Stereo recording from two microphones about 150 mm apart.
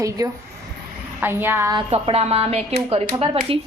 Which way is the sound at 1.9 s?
40° right (ahead or behind).